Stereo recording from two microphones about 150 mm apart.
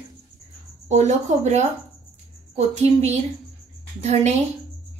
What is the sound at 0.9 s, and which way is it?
Speech, 50° right (ahead or behind).